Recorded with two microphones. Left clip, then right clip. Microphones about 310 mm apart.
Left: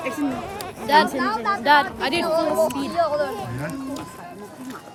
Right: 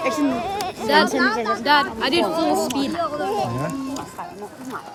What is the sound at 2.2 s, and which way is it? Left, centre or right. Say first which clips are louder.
Speech: left 4 dB; right.